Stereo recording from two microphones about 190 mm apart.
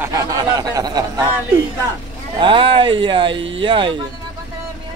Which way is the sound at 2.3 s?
25° right (ahead or behind).